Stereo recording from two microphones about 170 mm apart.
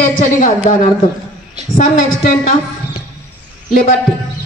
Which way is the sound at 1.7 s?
50° left (ahead or behind).